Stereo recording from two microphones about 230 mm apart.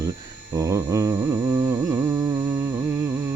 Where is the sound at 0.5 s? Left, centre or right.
Centre.